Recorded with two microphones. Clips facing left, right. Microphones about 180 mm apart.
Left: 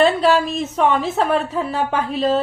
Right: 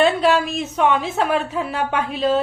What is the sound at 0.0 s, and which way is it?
A woman's voice, centre (ahead or behind).